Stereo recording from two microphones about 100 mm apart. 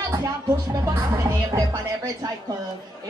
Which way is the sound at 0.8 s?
35° right (ahead or behind).